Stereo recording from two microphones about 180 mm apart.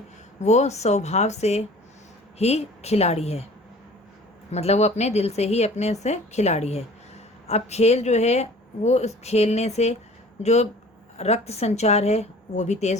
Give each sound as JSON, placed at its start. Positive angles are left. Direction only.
{"t": 0.4, "sound": "speech", "side_deg": 40}
{"t": 4.5, "sound": "speech", "side_deg": 35}